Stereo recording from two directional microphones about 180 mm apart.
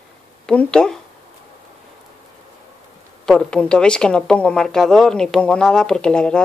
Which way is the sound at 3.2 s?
5° left (ahead or behind).